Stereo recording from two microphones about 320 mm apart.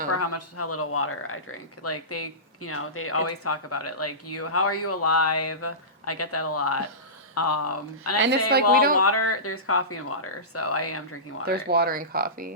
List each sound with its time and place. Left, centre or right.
0.1 s speech: left
8.7 s speech: right
9.0 s speech: left
11.4 s speech: right